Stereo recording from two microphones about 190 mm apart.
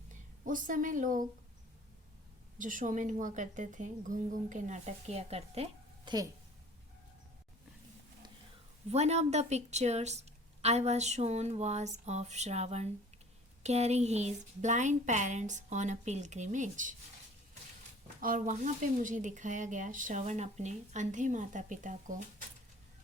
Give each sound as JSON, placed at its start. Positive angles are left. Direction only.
{"t": 0.4, "sound": "a woman's voice", "side_deg": -45}
{"t": 2.6, "sound": "a woman's voice", "side_deg": -45}
{"t": 8.9, "sound": "speech", "side_deg": -35}
{"t": 18.2, "sound": "speech", "side_deg": -45}